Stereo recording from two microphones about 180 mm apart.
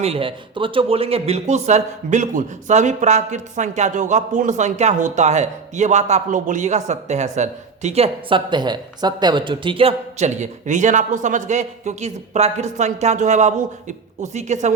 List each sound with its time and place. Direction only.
0.0 s speech: 30° right (ahead or behind)